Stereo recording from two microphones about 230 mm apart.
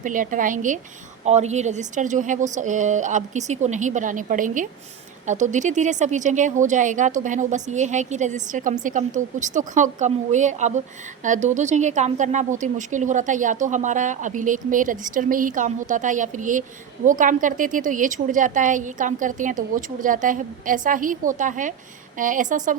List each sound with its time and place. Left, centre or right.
0.0 s speech: right